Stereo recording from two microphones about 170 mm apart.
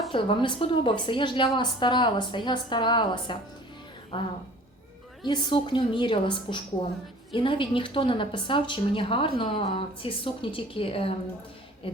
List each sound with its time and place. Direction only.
0.1 s a woman's voice: 30° left (ahead or behind)
5.2 s a woman's voice: 30° left (ahead or behind)